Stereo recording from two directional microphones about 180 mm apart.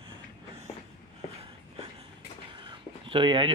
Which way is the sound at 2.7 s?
30° right (ahead or behind).